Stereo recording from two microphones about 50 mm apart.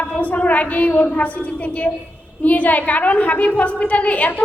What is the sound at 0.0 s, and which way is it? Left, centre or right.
A woman's voice, left.